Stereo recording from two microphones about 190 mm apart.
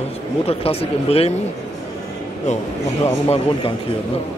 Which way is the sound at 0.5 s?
30° left (ahead or behind).